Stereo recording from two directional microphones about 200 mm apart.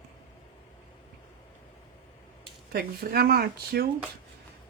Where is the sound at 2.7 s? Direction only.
50° right (ahead or behind).